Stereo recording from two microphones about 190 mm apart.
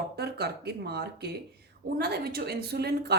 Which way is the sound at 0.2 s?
60° right (ahead or behind).